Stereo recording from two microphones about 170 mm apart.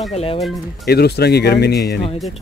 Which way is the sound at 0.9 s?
70° left (ahead or behind).